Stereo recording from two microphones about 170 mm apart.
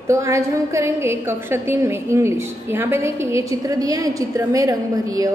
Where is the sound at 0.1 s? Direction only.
15° right (ahead or behind).